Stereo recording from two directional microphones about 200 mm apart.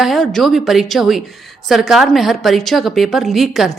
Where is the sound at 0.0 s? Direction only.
Centre (ahead or behind).